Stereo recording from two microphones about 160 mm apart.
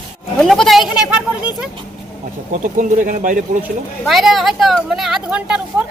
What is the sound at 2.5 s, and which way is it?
Speech, 55° right (ahead or behind).